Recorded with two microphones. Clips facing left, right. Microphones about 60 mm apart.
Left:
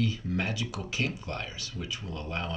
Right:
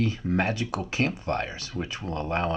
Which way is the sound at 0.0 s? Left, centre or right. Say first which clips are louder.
Right 5 dB; right.